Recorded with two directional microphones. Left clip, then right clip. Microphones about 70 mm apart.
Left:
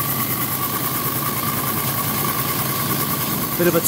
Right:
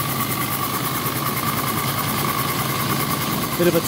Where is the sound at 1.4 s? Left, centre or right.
Centre.